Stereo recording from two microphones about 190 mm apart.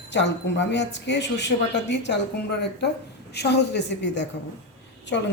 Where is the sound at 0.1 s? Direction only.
70° left (ahead or behind).